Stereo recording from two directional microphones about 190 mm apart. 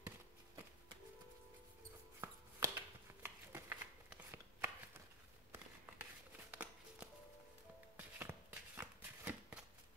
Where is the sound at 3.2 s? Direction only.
10° right (ahead or behind).